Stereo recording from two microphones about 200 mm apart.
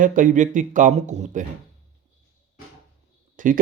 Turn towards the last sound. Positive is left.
turn(degrees=-40)  # may be behind; listen again after turning